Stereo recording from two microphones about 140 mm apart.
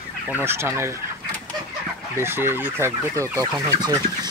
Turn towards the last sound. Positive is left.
turn(degrees=-25)  # may be behind; listen again after turning